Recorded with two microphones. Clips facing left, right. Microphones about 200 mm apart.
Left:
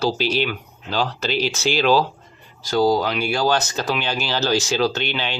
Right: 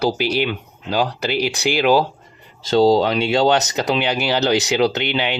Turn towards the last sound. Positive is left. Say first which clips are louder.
# right 4 dB
turn(degrees=-15)  # may be behind; listen again after turning